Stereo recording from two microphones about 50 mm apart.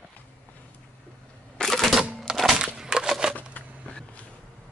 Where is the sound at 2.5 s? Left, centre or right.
Centre.